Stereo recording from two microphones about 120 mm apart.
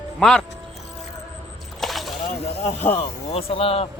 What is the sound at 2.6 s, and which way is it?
Speech, 65° left (ahead or behind).